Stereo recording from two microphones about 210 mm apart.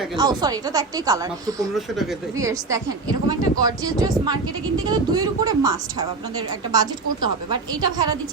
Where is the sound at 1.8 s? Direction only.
Centre (ahead or behind).